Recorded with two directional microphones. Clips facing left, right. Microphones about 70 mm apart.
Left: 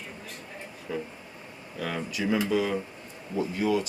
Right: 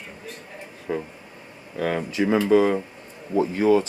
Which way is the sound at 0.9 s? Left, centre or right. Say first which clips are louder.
Right 6 dB; right.